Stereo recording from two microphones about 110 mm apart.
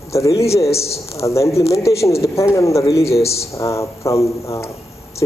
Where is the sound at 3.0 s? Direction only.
70° left (ahead or behind).